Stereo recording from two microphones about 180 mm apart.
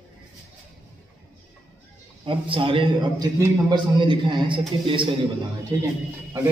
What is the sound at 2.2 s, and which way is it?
A man's voice, 30° right (ahead or behind).